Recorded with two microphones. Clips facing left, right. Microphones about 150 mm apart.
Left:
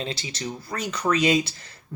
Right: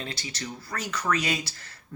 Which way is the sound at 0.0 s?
20° left (ahead or behind).